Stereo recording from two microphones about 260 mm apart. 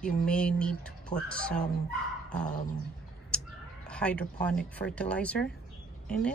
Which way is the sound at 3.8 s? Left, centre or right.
Centre.